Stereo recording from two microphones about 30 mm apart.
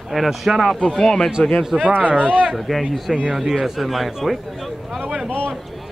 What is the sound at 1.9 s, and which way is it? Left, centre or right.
Speech, left.